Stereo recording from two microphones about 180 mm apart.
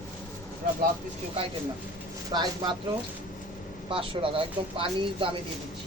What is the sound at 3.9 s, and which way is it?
A man's voice, 30° right (ahead or behind).